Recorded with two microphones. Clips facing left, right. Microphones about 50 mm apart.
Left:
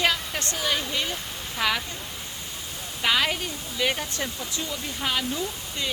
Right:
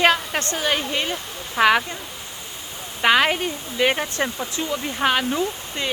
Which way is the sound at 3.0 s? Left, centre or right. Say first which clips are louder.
Right 7 dB; right.